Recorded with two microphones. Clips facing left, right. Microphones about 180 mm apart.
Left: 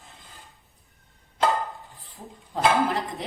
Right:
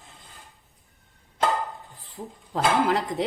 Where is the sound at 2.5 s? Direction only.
90° right.